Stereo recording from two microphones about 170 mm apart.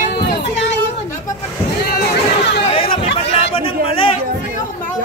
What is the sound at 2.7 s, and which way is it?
Chatter, 30° left (ahead or behind).